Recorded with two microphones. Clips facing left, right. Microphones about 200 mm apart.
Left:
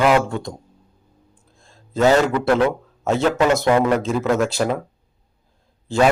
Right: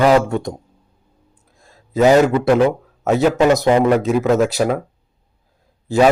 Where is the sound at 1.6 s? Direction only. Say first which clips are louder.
Right 5 dB; 5° right (ahead or behind).